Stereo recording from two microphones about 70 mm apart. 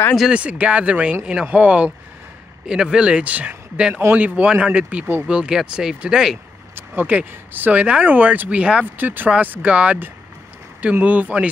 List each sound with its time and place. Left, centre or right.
0.3 s speech: centre
6.7 s speech: right